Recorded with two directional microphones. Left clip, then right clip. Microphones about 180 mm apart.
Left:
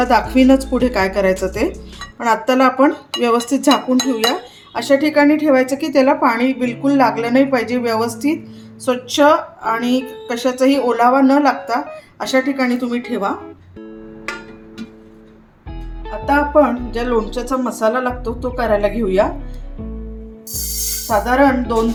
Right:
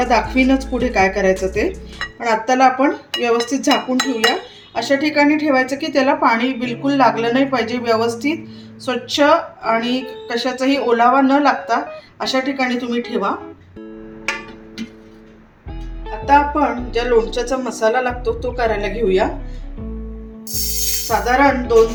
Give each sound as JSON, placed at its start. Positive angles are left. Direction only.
{"t": 0.0, "sound": "speech", "side_deg": 50}
{"t": 1.3, "sound": "speech", "side_deg": 0}
{"t": 2.1, "sound": "speech", "side_deg": 55}
{"t": 16.0, "sound": "speech", "side_deg": 50}
{"t": 21.2, "sound": "speech", "side_deg": 60}